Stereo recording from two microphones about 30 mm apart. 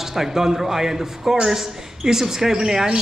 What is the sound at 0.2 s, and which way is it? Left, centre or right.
Speech, centre.